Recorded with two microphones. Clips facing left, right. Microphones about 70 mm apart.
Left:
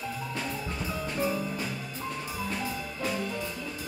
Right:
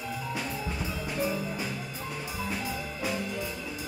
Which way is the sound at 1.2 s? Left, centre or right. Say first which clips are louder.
Even; centre.